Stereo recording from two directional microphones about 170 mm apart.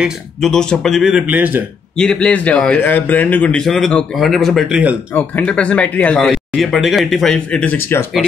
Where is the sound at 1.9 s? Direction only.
5° left (ahead or behind).